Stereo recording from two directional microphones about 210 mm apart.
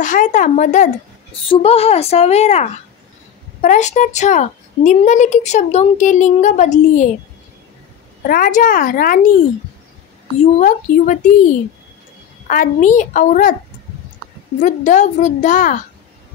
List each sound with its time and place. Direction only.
0.0 s a woman's voice: 40° left (ahead or behind)
8.3 s speech: 40° left (ahead or behind)
10.4 s speech: 35° left (ahead or behind)
12.4 s speech: 40° left (ahead or behind)
14.6 s speech: 35° left (ahead or behind)